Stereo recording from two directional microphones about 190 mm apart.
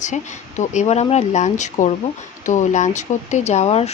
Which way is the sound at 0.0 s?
40° left (ahead or behind).